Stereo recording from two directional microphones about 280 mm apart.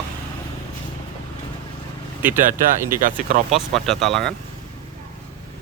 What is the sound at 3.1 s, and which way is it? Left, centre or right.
Speech, right.